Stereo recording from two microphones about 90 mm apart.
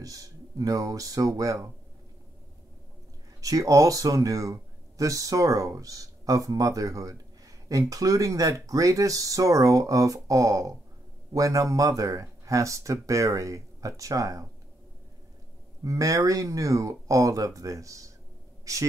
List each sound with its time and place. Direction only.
0.0 s speech: 40° right (ahead or behind)
3.3 s speech: 40° right (ahead or behind)
15.8 s speech: 40° right (ahead or behind)